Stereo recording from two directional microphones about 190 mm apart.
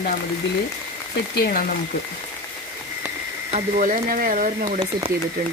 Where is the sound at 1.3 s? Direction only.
50° left (ahead or behind).